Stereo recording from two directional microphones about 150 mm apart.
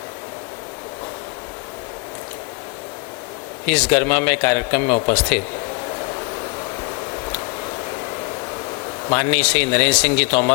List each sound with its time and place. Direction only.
3.7 s speech: 10° left (ahead or behind)
9.0 s speech: 10° left (ahead or behind)